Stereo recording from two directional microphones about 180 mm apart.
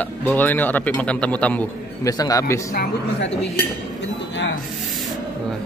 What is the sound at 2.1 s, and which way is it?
Speech, 20° left (ahead or behind).